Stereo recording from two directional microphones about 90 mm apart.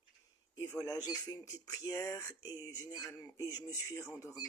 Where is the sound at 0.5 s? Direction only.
40° left (ahead or behind).